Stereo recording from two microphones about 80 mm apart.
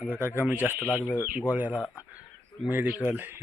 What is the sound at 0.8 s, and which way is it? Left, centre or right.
Speech, centre.